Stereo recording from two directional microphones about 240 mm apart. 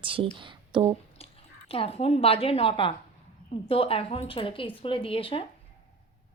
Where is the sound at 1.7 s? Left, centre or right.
Left.